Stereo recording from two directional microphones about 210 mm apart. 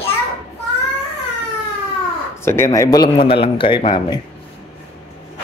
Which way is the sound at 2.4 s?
10° left (ahead or behind).